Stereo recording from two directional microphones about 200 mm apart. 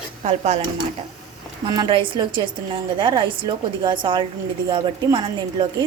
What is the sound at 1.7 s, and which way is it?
A woman's voice, 25° right (ahead or behind).